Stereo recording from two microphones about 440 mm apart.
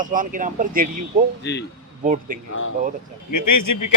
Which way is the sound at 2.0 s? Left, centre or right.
Centre.